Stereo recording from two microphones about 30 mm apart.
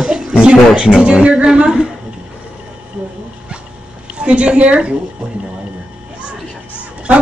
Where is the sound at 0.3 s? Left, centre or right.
Right.